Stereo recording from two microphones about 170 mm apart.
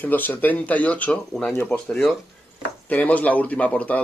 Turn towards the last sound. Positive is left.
turn(degrees=10)  # may be behind; listen again after turning